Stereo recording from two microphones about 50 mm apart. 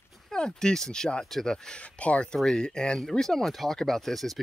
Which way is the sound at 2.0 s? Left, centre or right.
Left.